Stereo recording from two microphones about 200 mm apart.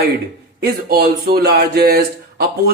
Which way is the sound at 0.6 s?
50° right (ahead or behind).